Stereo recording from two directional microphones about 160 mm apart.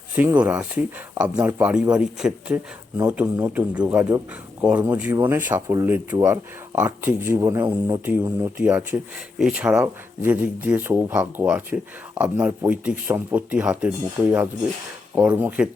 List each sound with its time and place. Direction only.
0.2 s speech: 10° right (ahead or behind)
8.5 s speech: 10° right (ahead or behind)
15.1 s speech: 10° right (ahead or behind)